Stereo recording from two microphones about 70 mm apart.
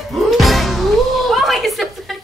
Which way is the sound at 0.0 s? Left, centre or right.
Centre.